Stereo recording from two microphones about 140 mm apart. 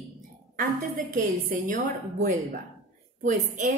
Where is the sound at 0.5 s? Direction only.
80° right; by 3.7 s 60° right (ahead or behind).